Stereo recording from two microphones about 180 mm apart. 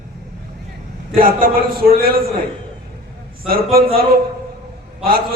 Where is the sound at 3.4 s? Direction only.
55° right (ahead or behind).